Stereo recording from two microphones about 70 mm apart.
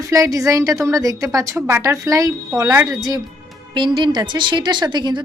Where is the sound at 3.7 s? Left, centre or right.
Right.